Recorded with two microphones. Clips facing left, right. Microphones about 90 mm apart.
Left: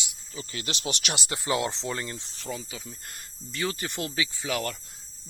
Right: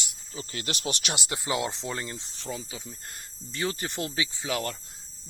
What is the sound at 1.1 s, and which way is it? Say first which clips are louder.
Speech: left 3 dB; 20° right (ahead or behind).